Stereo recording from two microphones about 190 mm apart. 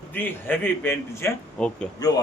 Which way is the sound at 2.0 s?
20° left (ahead or behind).